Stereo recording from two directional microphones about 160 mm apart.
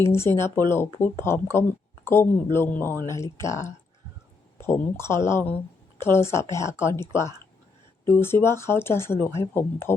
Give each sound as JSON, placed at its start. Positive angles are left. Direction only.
{"t": 0.0, "sound": "speech", "side_deg": 15}
{"t": 4.6, "sound": "speech", "side_deg": 15}